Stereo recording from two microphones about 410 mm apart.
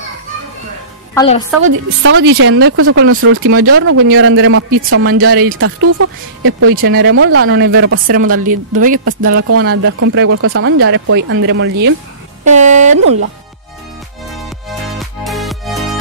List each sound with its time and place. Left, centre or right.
1.1 s a woman's voice: centre
1.6 s speech: right
12.4 s a sound: centre
15.2 s music: centre